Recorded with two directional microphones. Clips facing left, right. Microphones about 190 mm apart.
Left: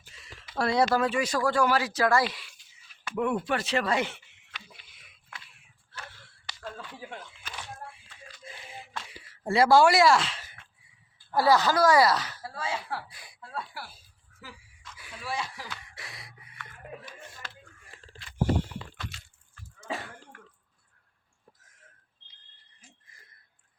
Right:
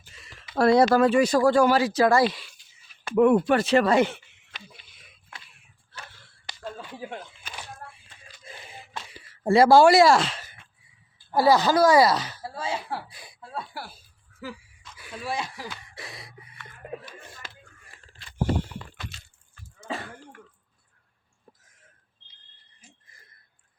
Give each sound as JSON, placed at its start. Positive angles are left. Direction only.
{"t": 0.1, "sound": "speech", "side_deg": -50}
{"t": 1.3, "sound": "speech", "side_deg": -30}
{"t": 2.3, "sound": "speech", "side_deg": -35}
{"t": 3.1, "sound": "speech", "side_deg": -50}
{"t": 4.5, "sound": "a sound", "side_deg": -30}
{"t": 6.0, "sound": "a sound", "side_deg": -20}
{"t": 8.4, "sound": "a sound", "side_deg": -45}
{"t": 9.4, "sound": "speech", "side_deg": -40}
{"t": 11.3, "sound": "a woman's voice", "side_deg": -15}
{"t": 11.5, "sound": "speech", "side_deg": -30}
{"t": 15.2, "sound": "speech", "side_deg": -20}
{"t": 15.7, "sound": "gasp", "side_deg": -30}